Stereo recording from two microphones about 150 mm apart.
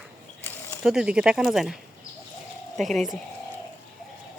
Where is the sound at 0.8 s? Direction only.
5° right (ahead or behind).